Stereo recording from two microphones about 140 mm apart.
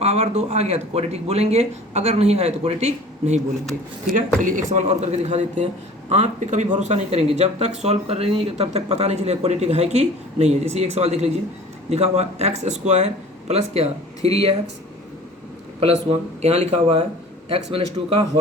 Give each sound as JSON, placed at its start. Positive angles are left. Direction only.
{"t": 0.0, "sound": "speech", "side_deg": -50}
{"t": 4.4, "sound": "speech", "side_deg": -70}
{"t": 4.7, "sound": "a man's voice", "side_deg": -55}
{"t": 15.8, "sound": "speech", "side_deg": -45}